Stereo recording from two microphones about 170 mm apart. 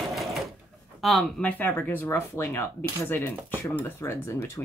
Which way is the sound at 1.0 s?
5° left (ahead or behind).